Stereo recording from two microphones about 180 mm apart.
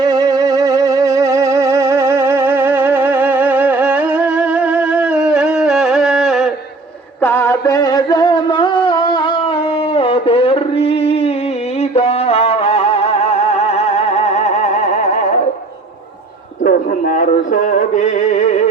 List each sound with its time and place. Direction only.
0.0 s music: 20° right (ahead or behind); by 6.5 s centre (ahead or behind)
7.2 s music: 10° left (ahead or behind); by 15.3 s 40° left (ahead or behind)
16.6 s a sound: 50° left (ahead or behind)